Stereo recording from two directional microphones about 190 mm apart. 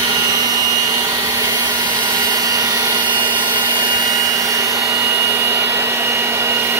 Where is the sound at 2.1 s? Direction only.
20° right (ahead or behind).